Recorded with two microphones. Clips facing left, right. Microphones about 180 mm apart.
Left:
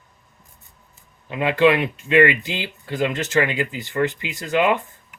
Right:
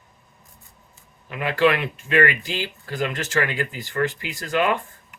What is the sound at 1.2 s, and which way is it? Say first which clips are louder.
Speech: left 3 dB; 20° left (ahead or behind).